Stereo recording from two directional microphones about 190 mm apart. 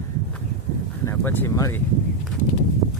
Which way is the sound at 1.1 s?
10° left (ahead or behind).